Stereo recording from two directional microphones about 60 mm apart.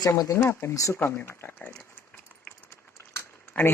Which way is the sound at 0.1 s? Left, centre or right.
Left.